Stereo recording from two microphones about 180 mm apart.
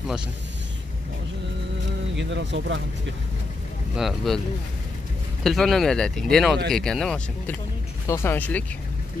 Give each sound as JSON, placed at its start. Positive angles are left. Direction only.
{"t": 2.1, "sound": "speech", "side_deg": -85}
{"t": 3.9, "sound": "speech", "side_deg": 0}
{"t": 5.4, "sound": "speech", "side_deg": 0}
{"t": 8.1, "sound": "speech", "side_deg": 15}